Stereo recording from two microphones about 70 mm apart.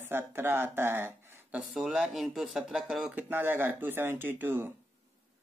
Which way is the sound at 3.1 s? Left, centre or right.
Right.